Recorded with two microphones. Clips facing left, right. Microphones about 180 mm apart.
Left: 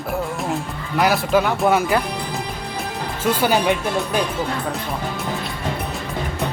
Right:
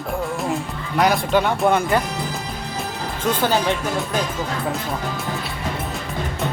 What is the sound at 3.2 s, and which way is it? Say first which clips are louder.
Speech: left 2 dB; 10° left (ahead or behind).